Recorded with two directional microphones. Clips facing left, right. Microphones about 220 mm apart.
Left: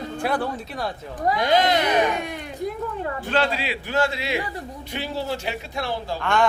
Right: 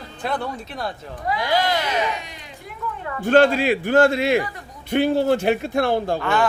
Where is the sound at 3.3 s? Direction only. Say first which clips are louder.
Right 10 dB; 50° right (ahead or behind).